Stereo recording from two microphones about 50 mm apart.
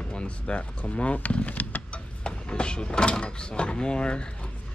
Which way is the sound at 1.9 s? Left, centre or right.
Left.